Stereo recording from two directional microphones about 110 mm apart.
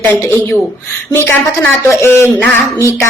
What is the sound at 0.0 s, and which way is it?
A woman's voice, 15° left (ahead or behind).